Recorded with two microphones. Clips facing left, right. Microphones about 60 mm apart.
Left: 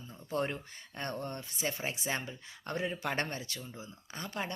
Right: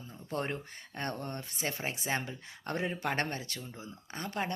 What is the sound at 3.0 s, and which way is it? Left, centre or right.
A woman's voice, right.